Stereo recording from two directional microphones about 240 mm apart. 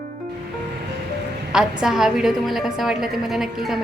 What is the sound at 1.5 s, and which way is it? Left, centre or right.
A woman's voice, centre.